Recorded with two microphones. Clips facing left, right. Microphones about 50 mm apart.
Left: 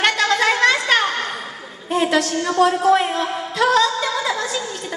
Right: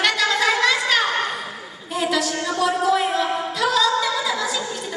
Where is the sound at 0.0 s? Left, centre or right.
Left.